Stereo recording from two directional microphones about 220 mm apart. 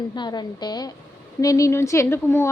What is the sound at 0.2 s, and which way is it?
A woman's voice, 20° left (ahead or behind).